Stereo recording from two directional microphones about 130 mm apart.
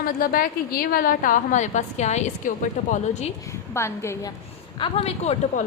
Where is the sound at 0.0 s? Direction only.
90° left; by 3.3 s 60° left (ahead or behind).